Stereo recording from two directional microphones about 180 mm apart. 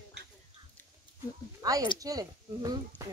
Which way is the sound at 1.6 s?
20° right (ahead or behind).